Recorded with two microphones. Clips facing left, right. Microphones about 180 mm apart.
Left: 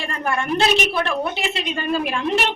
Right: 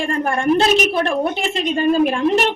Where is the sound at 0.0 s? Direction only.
45° right (ahead or behind).